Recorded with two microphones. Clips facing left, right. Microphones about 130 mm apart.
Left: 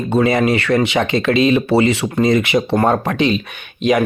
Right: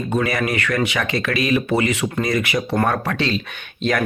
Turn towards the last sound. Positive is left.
turn(degrees=15)  # may be behind; listen again after turning